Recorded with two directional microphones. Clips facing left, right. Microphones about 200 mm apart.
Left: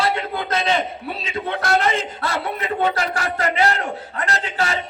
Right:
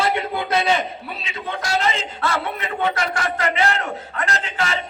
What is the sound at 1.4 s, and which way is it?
Speech, 55° left (ahead or behind).